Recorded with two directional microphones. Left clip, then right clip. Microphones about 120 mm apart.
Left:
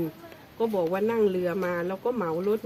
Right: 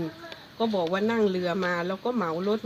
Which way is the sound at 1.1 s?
35° left (ahead or behind).